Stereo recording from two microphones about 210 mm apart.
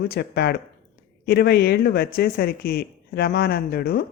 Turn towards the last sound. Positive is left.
turn(degrees=45)  # may be behind; listen again after turning